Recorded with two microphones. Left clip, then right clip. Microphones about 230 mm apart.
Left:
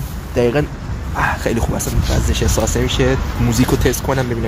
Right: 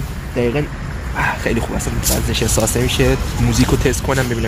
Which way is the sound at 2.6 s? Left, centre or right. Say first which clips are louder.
Even; centre.